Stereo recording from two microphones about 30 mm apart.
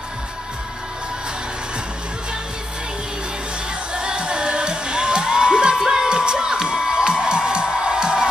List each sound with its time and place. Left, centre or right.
3.9 s music: right